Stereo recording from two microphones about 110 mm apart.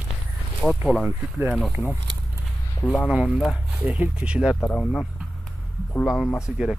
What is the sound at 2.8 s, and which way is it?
Speech, 15° left (ahead or behind).